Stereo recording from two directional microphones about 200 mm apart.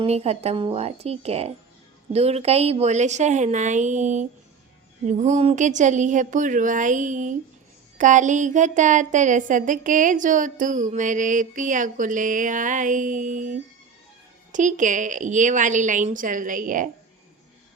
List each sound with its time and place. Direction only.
0.0 s a woman's voice: 30° right (ahead or behind)
14.5 s a woman's voice: 40° right (ahead or behind)